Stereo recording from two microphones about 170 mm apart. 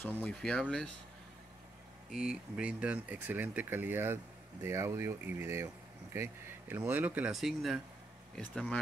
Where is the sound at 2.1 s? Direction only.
5° right (ahead or behind).